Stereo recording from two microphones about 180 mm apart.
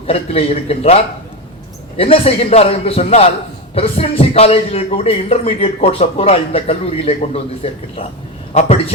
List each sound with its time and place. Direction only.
0.1 s a man's voice: 35° left (ahead or behind)
2.0 s a man's voice: 30° left (ahead or behind)